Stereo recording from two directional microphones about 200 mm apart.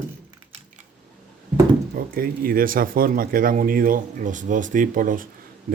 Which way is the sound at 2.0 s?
45° right (ahead or behind).